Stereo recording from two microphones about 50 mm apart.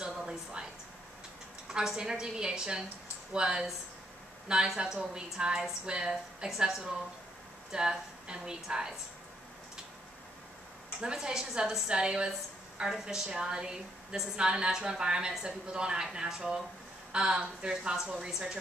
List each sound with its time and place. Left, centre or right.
0.0 s a sound: centre
1.7 s a woman's voice: centre
4.7 s a woman's voice: centre
11.0 s a woman's voice: centre